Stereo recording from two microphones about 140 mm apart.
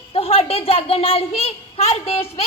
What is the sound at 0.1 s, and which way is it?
A child's voice, 45° left (ahead or behind).